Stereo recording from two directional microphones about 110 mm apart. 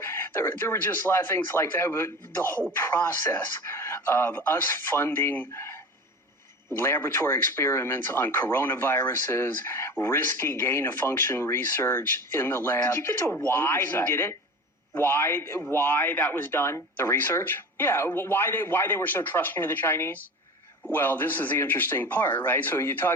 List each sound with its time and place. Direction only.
0.0 s speech: 20° left (ahead or behind)